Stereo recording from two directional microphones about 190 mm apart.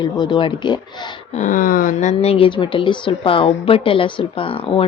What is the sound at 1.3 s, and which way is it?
Speech, 40° left (ahead or behind).